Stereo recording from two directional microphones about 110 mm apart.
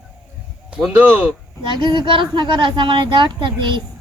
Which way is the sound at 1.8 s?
45° right (ahead or behind).